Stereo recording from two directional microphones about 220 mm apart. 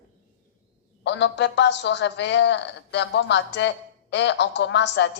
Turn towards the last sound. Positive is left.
turn(degrees=55)  # may be behind; listen again after turning